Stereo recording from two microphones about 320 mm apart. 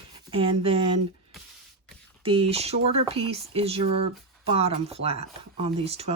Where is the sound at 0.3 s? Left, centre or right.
Centre.